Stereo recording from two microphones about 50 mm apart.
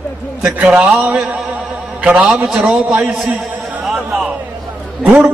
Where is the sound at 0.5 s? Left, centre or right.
Right.